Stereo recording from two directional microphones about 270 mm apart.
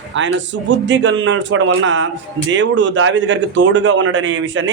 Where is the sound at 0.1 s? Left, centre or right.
Right.